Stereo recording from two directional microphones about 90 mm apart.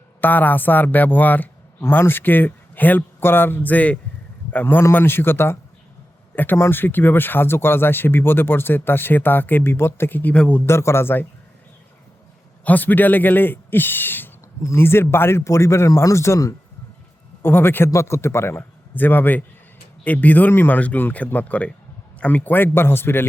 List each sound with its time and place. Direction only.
0.2 s speech: 20° left (ahead or behind)
10.7 s speech: 30° left (ahead or behind)
12.6 s speech: 20° left (ahead or behind)